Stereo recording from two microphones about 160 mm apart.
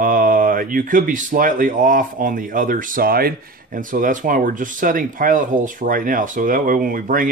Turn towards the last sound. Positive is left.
turn(degrees=-60)  # may be behind; listen again after turning